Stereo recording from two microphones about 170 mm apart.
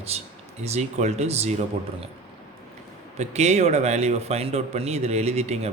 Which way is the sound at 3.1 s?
40° right (ahead or behind).